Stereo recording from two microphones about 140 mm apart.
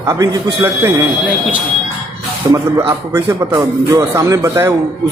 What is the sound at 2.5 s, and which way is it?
A man's voice, 25° right (ahead or behind).